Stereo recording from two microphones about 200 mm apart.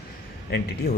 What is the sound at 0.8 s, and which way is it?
Speech, 55° left (ahead or behind).